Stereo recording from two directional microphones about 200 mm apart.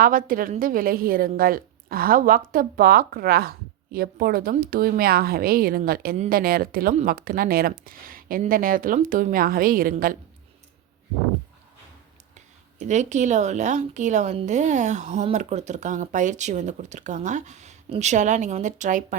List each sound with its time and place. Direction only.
0.0 s speech: 45° right (ahead or behind)
12.8 s a woman's voice: 35° right (ahead or behind)